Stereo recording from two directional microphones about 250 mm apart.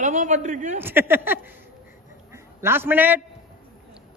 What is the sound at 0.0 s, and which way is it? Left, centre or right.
Speech, right.